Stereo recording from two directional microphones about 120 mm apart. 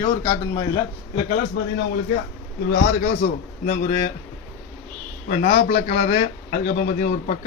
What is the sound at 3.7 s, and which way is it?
Speech, 90° left.